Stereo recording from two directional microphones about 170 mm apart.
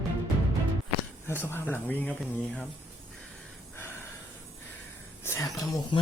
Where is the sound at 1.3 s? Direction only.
15° left (ahead or behind).